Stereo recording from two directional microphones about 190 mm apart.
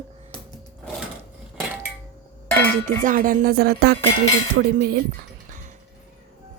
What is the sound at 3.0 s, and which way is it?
Music, 45° right (ahead or behind).